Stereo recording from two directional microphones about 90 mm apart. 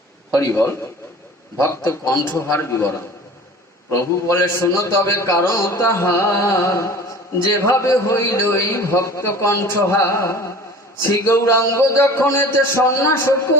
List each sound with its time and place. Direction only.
0.3 s a man's voice: 30° left (ahead or behind)
4.3 s a man's voice: 30° left (ahead or behind)